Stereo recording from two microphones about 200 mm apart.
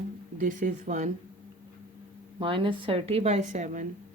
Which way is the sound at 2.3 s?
25° right (ahead or behind).